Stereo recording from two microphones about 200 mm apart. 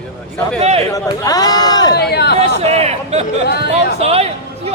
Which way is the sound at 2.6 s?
30° right (ahead or behind).